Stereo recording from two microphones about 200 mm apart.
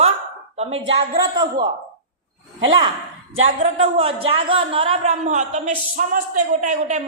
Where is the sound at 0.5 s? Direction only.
30° right (ahead or behind).